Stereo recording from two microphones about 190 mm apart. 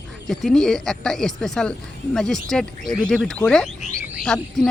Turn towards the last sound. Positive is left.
turn(degrees=0)  # may be behind; listen again after turning